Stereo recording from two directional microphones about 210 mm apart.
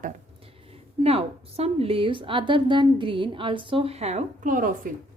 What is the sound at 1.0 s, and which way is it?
A woman's voice, 30° right (ahead or behind).